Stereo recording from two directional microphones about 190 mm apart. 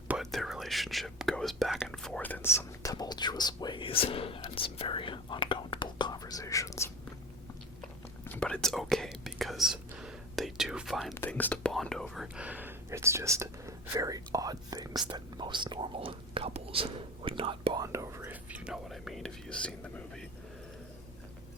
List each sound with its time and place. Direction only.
0.1 s speech: centre (ahead or behind)
11.1 s speech: 10° left (ahead or behind)